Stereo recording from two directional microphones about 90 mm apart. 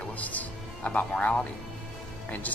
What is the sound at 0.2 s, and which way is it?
Music, 15° left (ahead or behind).